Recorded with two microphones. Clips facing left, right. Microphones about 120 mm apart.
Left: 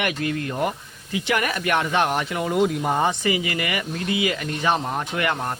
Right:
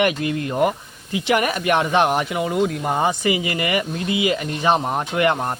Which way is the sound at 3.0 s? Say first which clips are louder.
Right 2 dB; 15° right (ahead or behind).